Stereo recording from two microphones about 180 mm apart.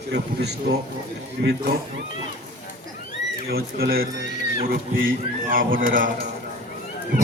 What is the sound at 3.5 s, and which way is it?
Speech, 60° right (ahead or behind).